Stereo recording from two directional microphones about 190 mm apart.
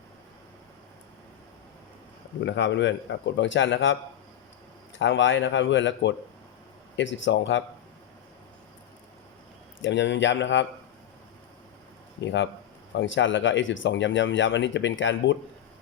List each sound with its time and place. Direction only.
2.4 s speech: 70° left (ahead or behind)
4.9 s speech: 75° left (ahead or behind)
9.8 s speech: 75° left (ahead or behind)
12.2 s speech: 75° left (ahead or behind)